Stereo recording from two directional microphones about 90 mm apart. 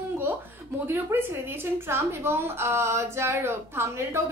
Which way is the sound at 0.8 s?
25° right (ahead or behind).